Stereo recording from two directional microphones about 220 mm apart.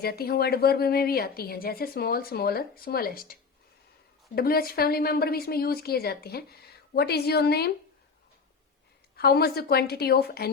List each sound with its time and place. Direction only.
0.0 s a woman's voice: 45° left (ahead or behind)
4.4 s a woman's voice: 45° left (ahead or behind)
9.1 s a woman's voice: 45° left (ahead or behind)